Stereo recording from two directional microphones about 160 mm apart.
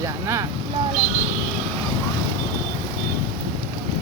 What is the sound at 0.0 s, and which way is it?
Vehicle, 20° right (ahead or behind).